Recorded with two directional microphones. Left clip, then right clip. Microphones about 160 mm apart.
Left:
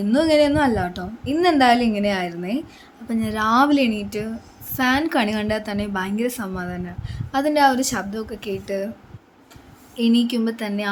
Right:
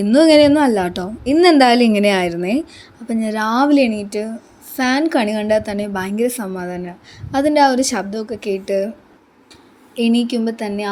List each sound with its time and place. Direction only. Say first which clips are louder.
0.1 s a woman's voice: right 7 dB; 40° right (ahead or behind)
3.1 s a woman's voice: right 1 dB; 25° right (ahead or behind)
9.9 s a woman's voice: right 3 dB; 20° right (ahead or behind)